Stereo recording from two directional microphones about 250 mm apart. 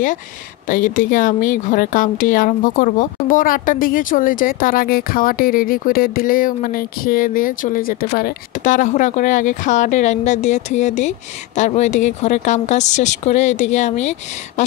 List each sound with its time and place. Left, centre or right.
0.7 s speech: left